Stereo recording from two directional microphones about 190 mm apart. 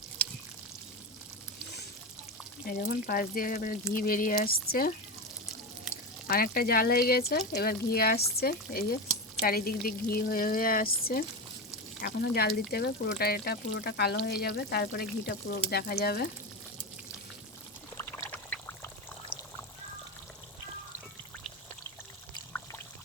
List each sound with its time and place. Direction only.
2.6 s speech: 50° left (ahead or behind)
6.2 s speech: 50° left (ahead or behind)
17.9 s pour: 10° left (ahead or behind)